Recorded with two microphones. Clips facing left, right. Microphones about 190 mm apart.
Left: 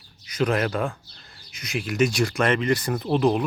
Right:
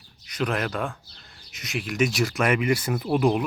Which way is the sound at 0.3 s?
Centre (ahead or behind).